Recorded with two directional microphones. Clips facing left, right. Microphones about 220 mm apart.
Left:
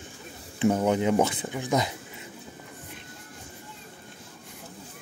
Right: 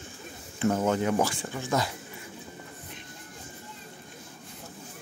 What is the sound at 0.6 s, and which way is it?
Speech, 15° left (ahead or behind).